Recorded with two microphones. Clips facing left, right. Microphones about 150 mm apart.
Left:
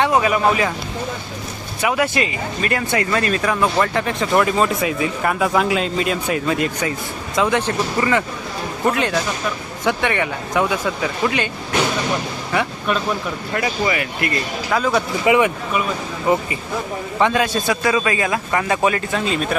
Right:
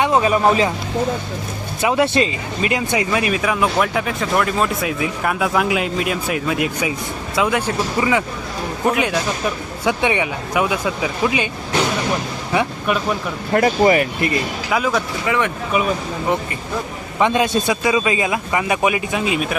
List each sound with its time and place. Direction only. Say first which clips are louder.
0.1 s a man's voice: right 1 dB; 30° right (ahead or behind)
1.8 s a man's voice: right 3 dB; 25° right (ahead or behind); by 11.4 s 10° right (ahead or behind)
12.5 s a man's voice: right 2 dB; 10° right (ahead or behind)
13.5 s speech: right 8 dB; 45° right (ahead or behind)
14.7 s speech: left 1 dB; 5° right (ahead or behind)
15.3 s speech: left 5 dB; 10° left (ahead or behind)
17.2 s a man's voice: right 1 dB; 20° right (ahead or behind)